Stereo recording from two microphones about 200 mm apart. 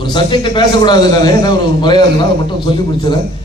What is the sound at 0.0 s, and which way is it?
A man's voice, 25° left (ahead or behind).